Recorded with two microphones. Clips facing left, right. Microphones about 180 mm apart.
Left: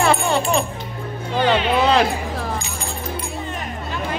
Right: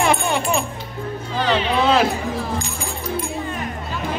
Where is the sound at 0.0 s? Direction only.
15° right (ahead or behind).